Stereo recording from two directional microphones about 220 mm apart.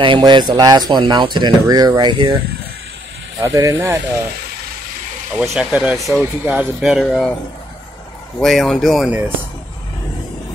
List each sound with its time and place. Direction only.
0.0 s speech: 20° right (ahead or behind)
3.3 s speech: 15° right (ahead or behind)
5.4 s speech: 5° right (ahead or behind)
8.4 s speech: centre (ahead or behind)